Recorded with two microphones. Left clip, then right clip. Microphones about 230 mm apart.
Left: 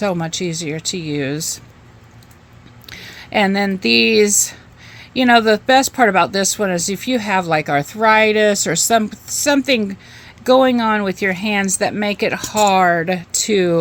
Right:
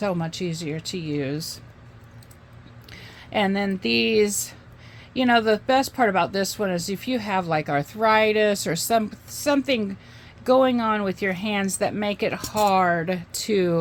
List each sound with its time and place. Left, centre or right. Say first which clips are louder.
0.0 s speech: left 7 dB; left
2.8 s speech: left 9 dB; left